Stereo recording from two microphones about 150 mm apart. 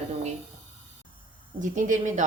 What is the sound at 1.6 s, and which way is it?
Speech, 55° right (ahead or behind).